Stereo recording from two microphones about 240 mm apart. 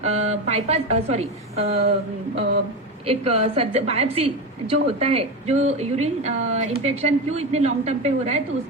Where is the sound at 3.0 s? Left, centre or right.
Right.